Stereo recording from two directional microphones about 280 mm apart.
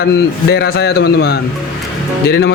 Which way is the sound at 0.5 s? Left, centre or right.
Left.